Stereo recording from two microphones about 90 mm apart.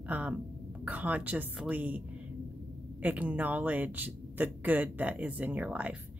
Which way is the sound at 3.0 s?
15° right (ahead or behind).